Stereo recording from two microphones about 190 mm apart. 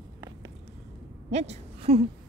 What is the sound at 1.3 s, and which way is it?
Speech, 35° right (ahead or behind).